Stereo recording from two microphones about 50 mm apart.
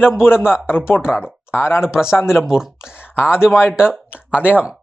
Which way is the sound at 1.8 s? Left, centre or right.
Centre.